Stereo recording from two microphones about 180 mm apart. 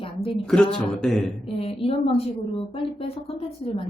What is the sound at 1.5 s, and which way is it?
A woman's voice, 30° left (ahead or behind).